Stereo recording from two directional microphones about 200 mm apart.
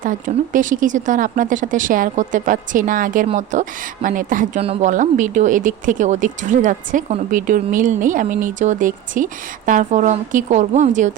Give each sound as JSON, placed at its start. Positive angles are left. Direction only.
{"t": 0.0, "sound": "speech", "side_deg": -40}